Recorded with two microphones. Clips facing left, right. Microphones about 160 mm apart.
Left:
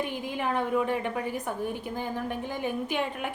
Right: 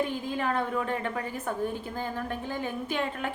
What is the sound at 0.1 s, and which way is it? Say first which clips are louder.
A woman's voice: even; 15° left (ahead or behind).